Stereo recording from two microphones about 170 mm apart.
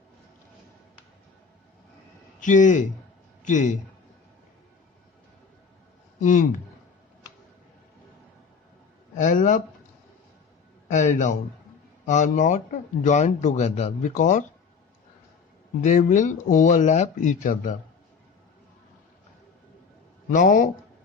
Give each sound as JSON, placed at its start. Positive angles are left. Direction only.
{"t": 2.4, "sound": "a man's voice", "side_deg": 45}
{"t": 6.1, "sound": "a man's voice", "side_deg": 50}
{"t": 9.1, "sound": "a man's voice", "side_deg": 50}
{"t": 10.9, "sound": "a man's voice", "side_deg": 45}
{"t": 15.8, "sound": "a man's voice", "side_deg": 45}
{"t": 20.3, "sound": "a man's voice", "side_deg": 50}